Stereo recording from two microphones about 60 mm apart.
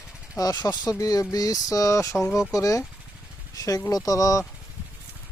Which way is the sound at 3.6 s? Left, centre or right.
Left.